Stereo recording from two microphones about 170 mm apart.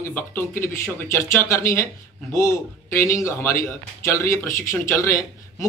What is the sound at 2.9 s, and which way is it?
A man's voice, 15° left (ahead or behind).